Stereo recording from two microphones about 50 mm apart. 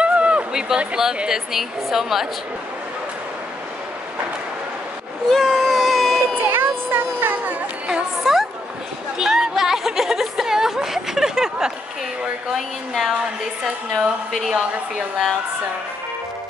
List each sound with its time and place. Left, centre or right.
0.0 s run: right
0.5 s a woman's voice: centre
5.3 s baby cry: centre
6.4 s children playing: right
7.9 s a sound: centre
12.5 s a woman's voice: centre